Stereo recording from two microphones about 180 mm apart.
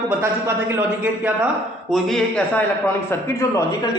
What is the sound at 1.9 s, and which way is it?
Speech, 5° left (ahead or behind).